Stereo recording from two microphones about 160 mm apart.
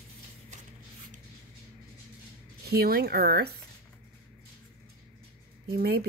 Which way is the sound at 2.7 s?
75° right (ahead or behind).